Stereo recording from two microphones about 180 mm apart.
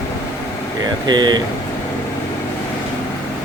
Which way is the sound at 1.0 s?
25° right (ahead or behind).